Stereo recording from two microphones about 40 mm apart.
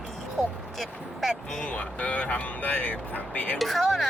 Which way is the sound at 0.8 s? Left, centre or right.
Centre.